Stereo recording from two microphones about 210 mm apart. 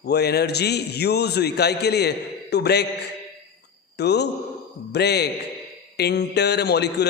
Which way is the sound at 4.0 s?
50° left (ahead or behind).